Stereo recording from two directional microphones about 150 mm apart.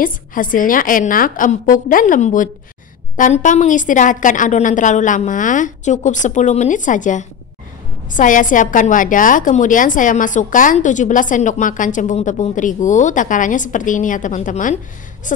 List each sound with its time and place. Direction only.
0.0 s a woman's voice: 65° left (ahead or behind)